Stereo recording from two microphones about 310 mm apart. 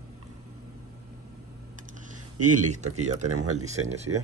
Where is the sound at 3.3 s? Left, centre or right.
Right.